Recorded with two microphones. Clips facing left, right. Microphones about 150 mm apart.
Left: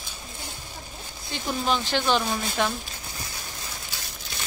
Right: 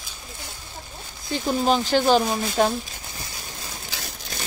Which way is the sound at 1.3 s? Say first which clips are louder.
Right 5 dB; 40° right (ahead or behind).